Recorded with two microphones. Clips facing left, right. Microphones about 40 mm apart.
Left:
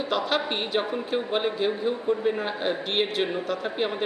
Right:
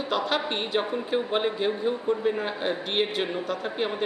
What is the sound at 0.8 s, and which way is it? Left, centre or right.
A man's voice, centre.